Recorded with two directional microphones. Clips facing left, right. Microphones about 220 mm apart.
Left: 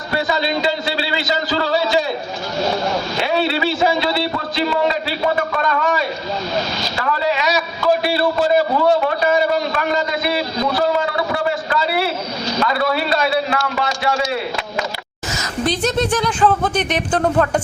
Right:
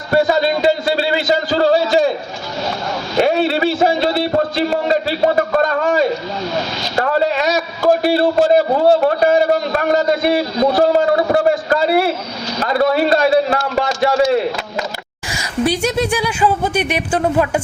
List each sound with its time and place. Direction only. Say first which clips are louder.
0.1 s a man's voice: right 6 dB; 50° right (ahead or behind)
3.2 s a man's voice: right 7 dB; 45° right (ahead or behind)
6.9 s a man's voice: right 5 dB; 50° right (ahead or behind)
15.3 s speech: right 3 dB; 10° right (ahead or behind)